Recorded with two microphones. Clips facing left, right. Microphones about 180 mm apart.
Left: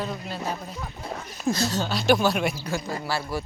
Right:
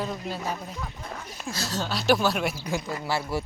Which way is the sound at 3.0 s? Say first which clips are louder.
Right 2 dB; 20° right (ahead or behind).